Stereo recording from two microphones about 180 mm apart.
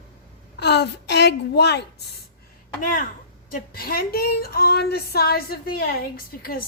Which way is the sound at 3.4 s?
55° left (ahead or behind).